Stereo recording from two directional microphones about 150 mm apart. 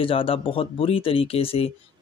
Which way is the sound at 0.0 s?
35° left (ahead or behind).